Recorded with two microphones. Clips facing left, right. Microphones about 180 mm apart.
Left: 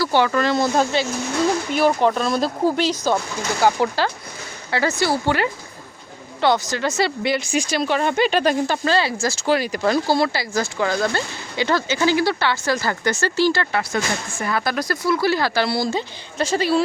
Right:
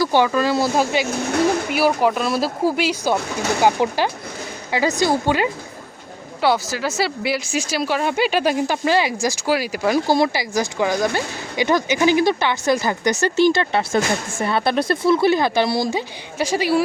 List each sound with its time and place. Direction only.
0.0 s speech: 15° right (ahead or behind)